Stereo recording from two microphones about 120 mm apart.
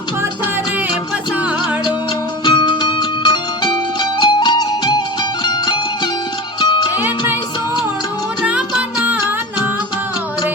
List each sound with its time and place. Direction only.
2.4 s music: 40° left (ahead or behind)
8.4 s music: 10° right (ahead or behind)